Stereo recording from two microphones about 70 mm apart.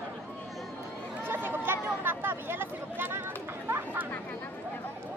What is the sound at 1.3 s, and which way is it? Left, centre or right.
Chatter, right.